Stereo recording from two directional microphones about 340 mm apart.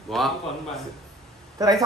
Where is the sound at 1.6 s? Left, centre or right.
Centre.